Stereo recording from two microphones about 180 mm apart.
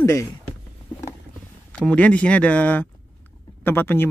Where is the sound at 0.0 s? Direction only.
15° left (ahead or behind).